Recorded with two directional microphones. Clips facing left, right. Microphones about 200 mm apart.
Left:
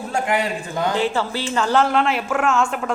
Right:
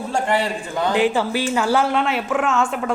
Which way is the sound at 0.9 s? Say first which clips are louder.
Right 5 dB; 15° right (ahead or behind).